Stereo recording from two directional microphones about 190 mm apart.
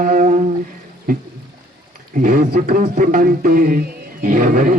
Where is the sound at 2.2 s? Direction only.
50° right (ahead or behind).